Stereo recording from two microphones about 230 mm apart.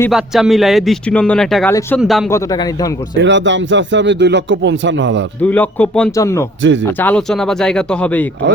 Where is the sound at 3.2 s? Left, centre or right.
Right.